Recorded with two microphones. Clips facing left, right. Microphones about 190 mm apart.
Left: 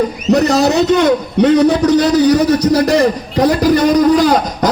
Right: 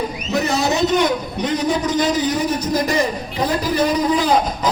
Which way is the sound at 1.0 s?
75° left (ahead or behind).